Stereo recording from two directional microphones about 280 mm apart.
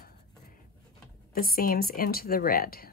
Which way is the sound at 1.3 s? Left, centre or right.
Left.